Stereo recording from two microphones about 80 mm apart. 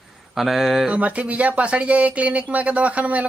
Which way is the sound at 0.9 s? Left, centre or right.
Centre.